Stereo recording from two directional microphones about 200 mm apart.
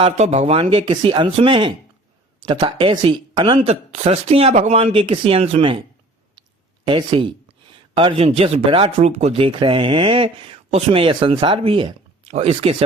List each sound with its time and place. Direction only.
0.0 s speech: 35° right (ahead or behind)
6.8 s speech: 25° right (ahead or behind)